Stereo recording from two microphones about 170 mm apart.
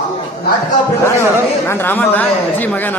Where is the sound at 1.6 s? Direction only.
10° left (ahead or behind).